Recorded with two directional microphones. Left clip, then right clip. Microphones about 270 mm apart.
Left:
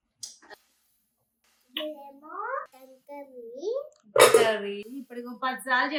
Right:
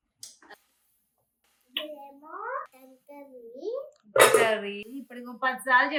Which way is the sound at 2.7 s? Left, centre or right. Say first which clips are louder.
Left 5 dB; centre.